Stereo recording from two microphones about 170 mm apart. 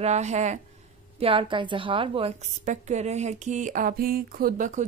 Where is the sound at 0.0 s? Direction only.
40° right (ahead or behind).